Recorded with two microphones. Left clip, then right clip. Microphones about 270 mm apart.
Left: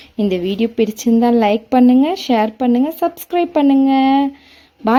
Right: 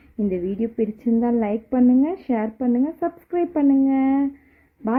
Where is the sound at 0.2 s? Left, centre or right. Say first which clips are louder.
Left 7 dB; left.